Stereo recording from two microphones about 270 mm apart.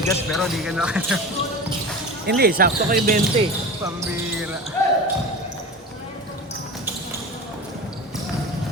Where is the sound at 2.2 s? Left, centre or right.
Right.